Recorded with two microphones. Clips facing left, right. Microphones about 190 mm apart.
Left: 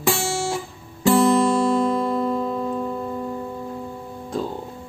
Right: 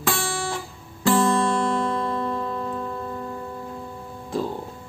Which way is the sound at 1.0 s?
20° left (ahead or behind).